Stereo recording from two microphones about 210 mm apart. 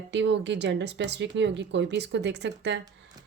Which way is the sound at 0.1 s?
55° right (ahead or behind).